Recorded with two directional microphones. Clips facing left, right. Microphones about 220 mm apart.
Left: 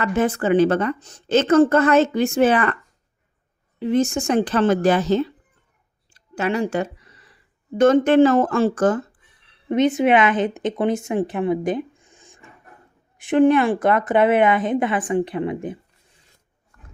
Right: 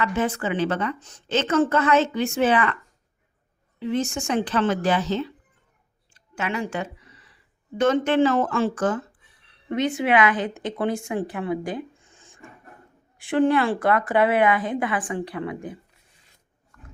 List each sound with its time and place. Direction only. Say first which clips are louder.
0.0 s a woman's voice: left 4 dB; 45° left (ahead or behind)
3.8 s a woman's voice: left 6 dB; 45° left (ahead or behind)
6.1 s a sound: left 6 dB; 35° left (ahead or behind)
7.8 s a woman's voice: left 6 dB; 45° left (ahead or behind)
9.6 s a woman's voice: left 6 dB; 20° left (ahead or behind)